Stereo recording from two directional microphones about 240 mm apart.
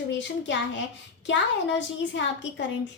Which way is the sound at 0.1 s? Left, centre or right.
Left.